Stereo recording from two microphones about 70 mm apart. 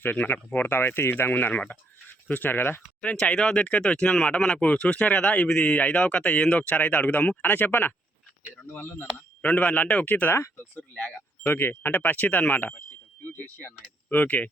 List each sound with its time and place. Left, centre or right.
0.0 s speech: left
3.0 s speech: centre
10.8 s speech: centre
11.4 s speech: left